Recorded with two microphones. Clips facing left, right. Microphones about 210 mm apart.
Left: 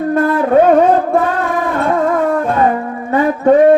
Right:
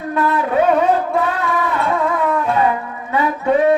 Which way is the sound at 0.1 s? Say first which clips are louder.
Left 5 dB; 50° left (ahead or behind).